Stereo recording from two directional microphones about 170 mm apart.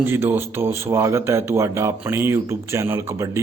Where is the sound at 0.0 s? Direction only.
10° right (ahead or behind).